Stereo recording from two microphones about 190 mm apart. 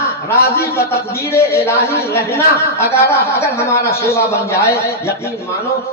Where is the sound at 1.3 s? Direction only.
15° left (ahead or behind).